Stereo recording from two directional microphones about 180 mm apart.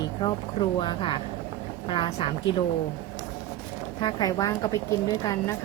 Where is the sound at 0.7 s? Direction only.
25° left (ahead or behind).